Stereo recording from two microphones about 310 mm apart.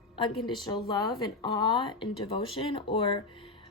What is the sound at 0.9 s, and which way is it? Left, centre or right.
Speech, centre.